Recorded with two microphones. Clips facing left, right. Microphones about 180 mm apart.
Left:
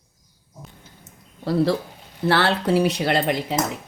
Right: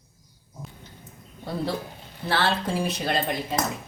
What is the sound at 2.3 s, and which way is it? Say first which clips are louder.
Speech: left 5 dB; 70° left (ahead or behind).